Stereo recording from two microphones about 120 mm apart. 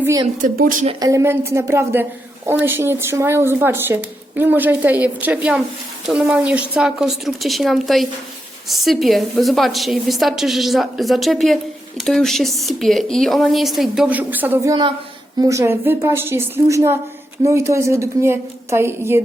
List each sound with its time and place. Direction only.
0.4 s speech: 90° right
0.9 s a woman's voice: 30° right (ahead or behind)
14.6 s a woman's voice: 30° right (ahead or behind)